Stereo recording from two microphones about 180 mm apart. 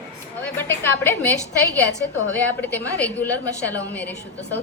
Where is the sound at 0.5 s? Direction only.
10° left (ahead or behind).